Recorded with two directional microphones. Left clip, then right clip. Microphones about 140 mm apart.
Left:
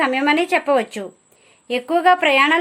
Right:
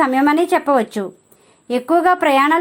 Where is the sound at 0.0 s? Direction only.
Centre (ahead or behind).